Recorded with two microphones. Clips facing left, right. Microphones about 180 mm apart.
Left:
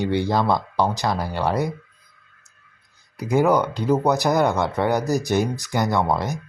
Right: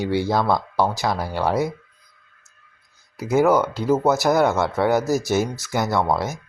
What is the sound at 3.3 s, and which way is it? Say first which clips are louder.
Speech: right 1 dB; 5° right (ahead or behind).